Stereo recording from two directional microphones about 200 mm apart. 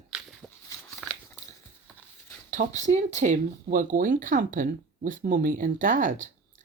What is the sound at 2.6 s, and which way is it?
Speech, 40° right (ahead or behind).